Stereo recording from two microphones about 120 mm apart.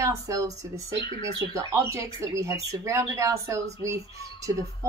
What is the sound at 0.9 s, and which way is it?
Speech, 45° left (ahead or behind).